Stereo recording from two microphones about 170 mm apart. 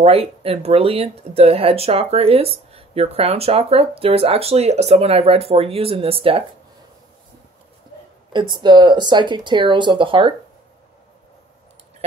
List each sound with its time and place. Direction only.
0.0 s speech: 35° right (ahead or behind)
8.3 s speech: 25° right (ahead or behind)